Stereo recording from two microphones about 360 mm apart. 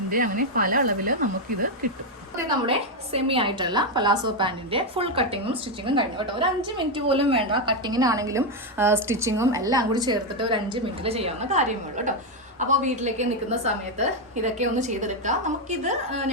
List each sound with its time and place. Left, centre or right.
0.1 s a woman's voice: right
2.6 s a woman's voice: centre